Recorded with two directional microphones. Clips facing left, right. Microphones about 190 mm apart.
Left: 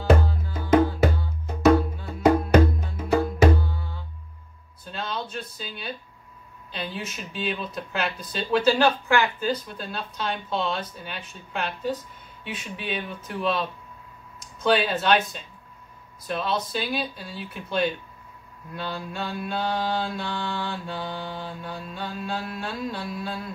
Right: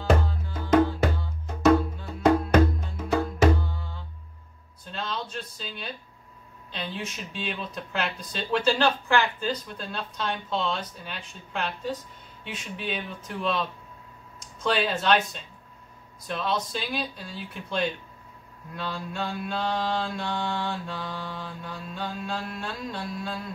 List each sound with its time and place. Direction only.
0.0 s music: 5° left (ahead or behind)
2.2 s music: 5° left (ahead or behind)
4.8 s a sound: 5° left (ahead or behind)
6.7 s speech: 5° left (ahead or behind)
14.6 s speech: centre (ahead or behind)
16.3 s speech: 5° left (ahead or behind)
21.3 s mantra: 35° left (ahead or behind)
21.6 s speech: centre (ahead or behind)